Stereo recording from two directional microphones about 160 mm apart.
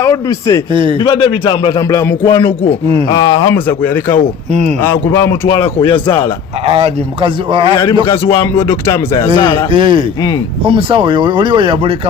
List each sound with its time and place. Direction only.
0.0 s a man's voice: 20° left (ahead or behind)
0.7 s speech: 30° right (ahead or behind)
0.9 s a man's voice: 30° left (ahead or behind)
2.2 s speech: 30° left (ahead or behind)
5.8 s speech: 30° left (ahead or behind)
6.7 s speech: 40° right (ahead or behind)
8.5 s a man's voice: 20° left (ahead or behind)
9.7 s speech: 30° right (ahead or behind)